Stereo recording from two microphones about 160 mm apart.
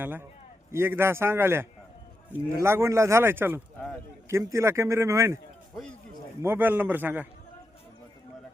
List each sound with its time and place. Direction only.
0.0 s speech: 10° right (ahead or behind)
6.4 s speech: 15° right (ahead or behind)